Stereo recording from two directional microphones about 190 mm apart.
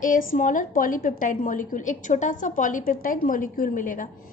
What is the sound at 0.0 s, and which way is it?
A woman's voice, 45° left (ahead or behind).